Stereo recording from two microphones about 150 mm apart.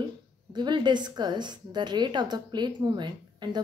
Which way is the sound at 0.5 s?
30° right (ahead or behind).